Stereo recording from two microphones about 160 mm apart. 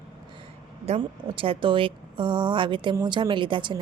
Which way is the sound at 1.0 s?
35° right (ahead or behind).